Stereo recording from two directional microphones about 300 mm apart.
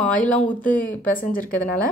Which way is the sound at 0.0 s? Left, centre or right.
Centre.